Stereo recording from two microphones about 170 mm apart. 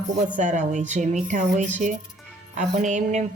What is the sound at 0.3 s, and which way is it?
A woman's voice, 45° right (ahead or behind).